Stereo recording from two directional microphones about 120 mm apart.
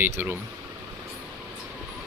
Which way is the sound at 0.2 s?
15° right (ahead or behind).